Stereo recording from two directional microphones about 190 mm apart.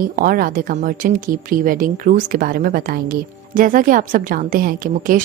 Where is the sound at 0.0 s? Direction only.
50° right (ahead or behind).